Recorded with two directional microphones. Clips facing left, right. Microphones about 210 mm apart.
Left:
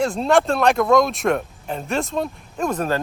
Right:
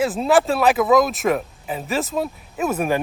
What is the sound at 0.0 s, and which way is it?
Speech, 5° right (ahead or behind).